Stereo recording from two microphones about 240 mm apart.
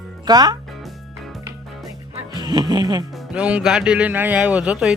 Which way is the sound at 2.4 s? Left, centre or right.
Centre.